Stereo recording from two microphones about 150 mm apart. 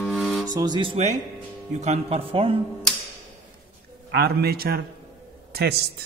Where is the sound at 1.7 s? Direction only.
50° right (ahead or behind).